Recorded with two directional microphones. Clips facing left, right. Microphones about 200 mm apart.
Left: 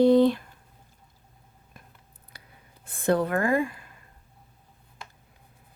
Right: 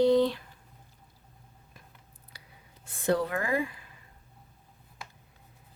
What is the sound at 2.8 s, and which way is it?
A woman's voice, 55° left (ahead or behind).